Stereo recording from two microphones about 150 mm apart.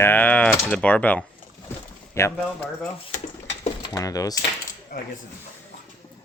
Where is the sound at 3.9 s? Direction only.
25° left (ahead or behind).